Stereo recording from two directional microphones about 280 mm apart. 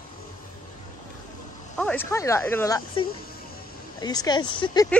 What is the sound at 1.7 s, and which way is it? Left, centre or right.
Speech, centre.